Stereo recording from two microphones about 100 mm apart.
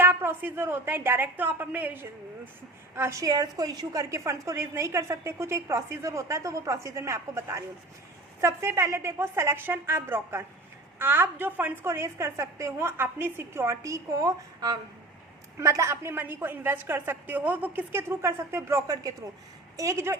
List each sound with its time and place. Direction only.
0.0 s a woman's voice: 25° right (ahead or behind)